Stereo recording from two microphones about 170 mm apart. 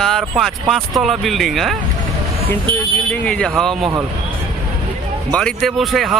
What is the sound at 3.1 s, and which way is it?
Speech, 5° left (ahead or behind).